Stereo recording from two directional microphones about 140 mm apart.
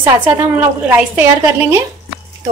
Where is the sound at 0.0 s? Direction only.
15° right (ahead or behind).